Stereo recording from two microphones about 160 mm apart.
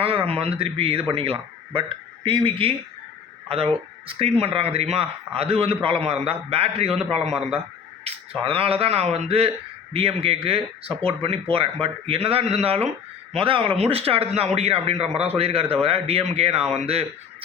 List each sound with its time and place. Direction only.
0.0 s speech: 35° right (ahead or behind)